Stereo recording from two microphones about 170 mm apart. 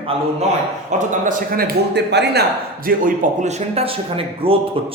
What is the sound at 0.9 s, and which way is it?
A man's voice, 45° right (ahead or behind).